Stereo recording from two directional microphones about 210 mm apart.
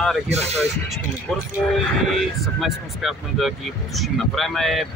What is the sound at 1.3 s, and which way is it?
Speech, centre (ahead or behind).